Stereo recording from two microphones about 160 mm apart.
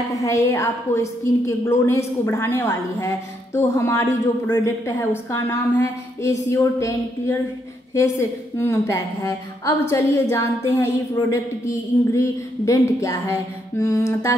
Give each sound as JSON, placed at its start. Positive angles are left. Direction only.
{"t": 0.1, "sound": "a woman's voice", "side_deg": 20}